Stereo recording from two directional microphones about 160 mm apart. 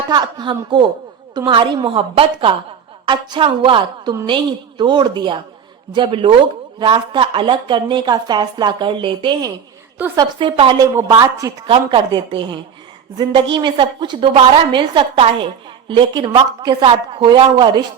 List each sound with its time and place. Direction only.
0.1 s a woman's voice: 25° right (ahead or behind)